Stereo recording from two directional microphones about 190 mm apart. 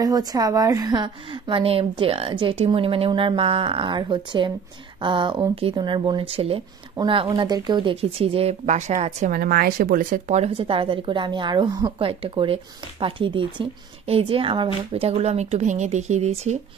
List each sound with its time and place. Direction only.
0.0 s speech: 20° right (ahead or behind); by 16.5 s 35° right (ahead or behind)